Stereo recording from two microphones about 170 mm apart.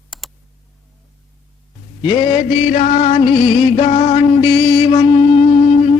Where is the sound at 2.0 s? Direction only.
35° left (ahead or behind).